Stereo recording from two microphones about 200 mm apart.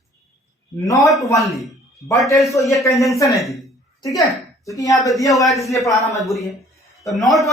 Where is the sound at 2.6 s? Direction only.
15° left (ahead or behind).